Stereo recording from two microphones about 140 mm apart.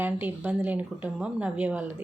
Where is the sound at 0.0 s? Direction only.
15° right (ahead or behind).